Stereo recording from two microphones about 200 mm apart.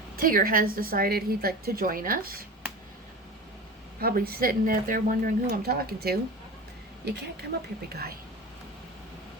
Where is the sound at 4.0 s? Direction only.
50° right (ahead or behind).